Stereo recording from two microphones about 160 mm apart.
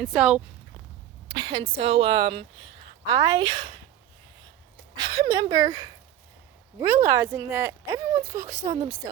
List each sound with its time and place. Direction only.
0.0 s speech: centre (ahead or behind)
1.3 s a woman's voice: 30° right (ahead or behind)
4.9 s speech: 25° right (ahead or behind)